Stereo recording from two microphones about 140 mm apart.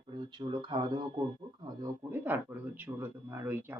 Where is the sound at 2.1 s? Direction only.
15° right (ahead or behind).